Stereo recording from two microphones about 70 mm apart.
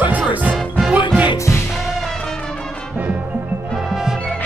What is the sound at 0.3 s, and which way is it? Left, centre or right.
Music, right.